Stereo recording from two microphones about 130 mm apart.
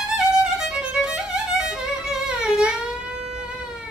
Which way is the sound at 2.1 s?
5° right (ahead or behind).